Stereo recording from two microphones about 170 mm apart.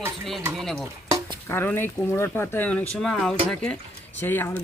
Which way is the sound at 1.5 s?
10° left (ahead or behind).